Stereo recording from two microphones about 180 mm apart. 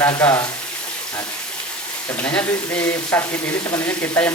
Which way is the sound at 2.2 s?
10° left (ahead or behind).